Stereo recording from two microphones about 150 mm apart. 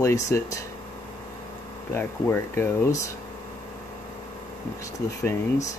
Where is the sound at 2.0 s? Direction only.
15° left (ahead or behind).